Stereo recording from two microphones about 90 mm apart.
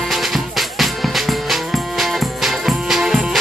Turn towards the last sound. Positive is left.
turn(degrees=-5)  # may be behind; listen again after turning